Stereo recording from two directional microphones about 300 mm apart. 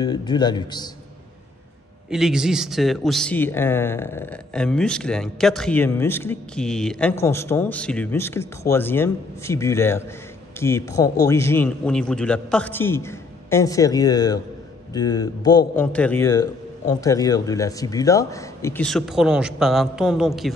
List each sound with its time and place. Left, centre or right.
0.0 s a man's voice: centre
2.0 s a man's voice: centre